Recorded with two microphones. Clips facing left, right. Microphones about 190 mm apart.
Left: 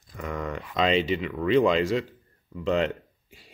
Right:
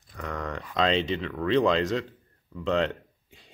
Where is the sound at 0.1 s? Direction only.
5° left (ahead or behind).